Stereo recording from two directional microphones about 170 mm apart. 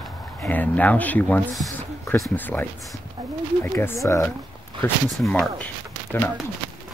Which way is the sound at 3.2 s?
25° right (ahead or behind).